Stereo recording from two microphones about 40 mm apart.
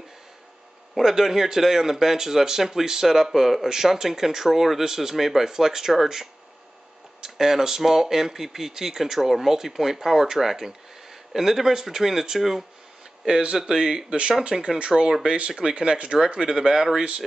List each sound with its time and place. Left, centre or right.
1.0 s speech: centre
13.2 s speech: centre
14.5 s speech: centre
14.9 s speech: centre
15.2 s speech: right